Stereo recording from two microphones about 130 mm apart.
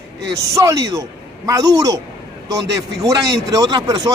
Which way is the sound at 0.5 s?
25° right (ahead or behind).